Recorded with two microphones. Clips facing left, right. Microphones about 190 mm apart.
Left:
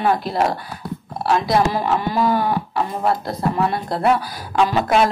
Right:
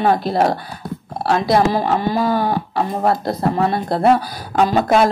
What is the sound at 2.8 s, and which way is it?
Speech, 50° right (ahead or behind).